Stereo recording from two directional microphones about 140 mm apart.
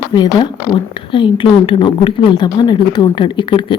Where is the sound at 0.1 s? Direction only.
30° left (ahead or behind).